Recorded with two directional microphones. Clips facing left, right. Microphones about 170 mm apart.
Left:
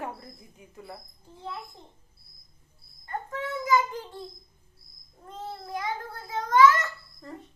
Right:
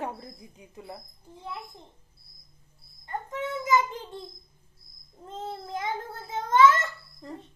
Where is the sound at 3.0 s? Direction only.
20° right (ahead or behind).